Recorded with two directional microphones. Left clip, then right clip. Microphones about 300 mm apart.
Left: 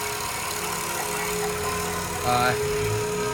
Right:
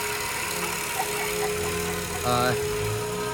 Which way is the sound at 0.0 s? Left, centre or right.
Centre.